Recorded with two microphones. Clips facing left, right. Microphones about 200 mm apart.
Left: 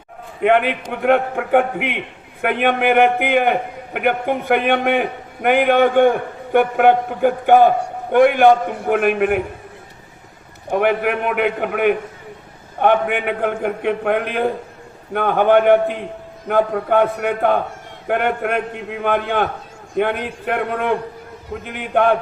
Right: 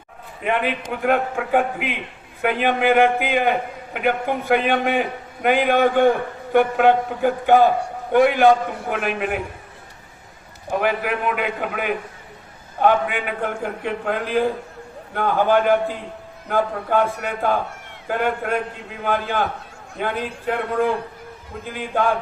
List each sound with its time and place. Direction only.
0.4 s a man's voice: 65° left (ahead or behind)
10.7 s a man's voice: 60° left (ahead or behind)